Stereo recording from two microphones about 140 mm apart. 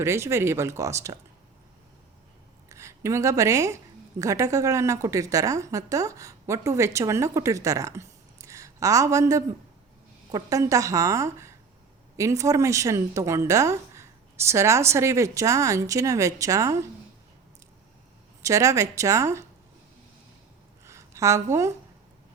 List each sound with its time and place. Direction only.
0.0 s a woman's voice: 20° right (ahead or behind)
2.6 s a woman's voice: 20° right (ahead or behind)
18.4 s a woman's voice: 20° right (ahead or behind)
20.8 s a sound: 20° right (ahead or behind)